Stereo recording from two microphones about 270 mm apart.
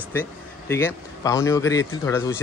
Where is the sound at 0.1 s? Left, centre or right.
Centre.